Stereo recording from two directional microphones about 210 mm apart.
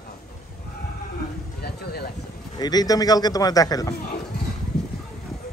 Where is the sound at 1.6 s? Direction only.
50° left (ahead or behind).